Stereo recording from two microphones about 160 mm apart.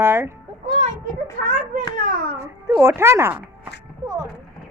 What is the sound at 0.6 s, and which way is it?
Children playing, 35° right (ahead or behind).